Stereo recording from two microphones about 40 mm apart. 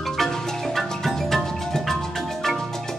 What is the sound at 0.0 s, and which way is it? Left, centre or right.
Percussion, centre.